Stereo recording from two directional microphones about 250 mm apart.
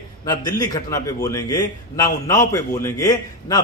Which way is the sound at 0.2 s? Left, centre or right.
Centre.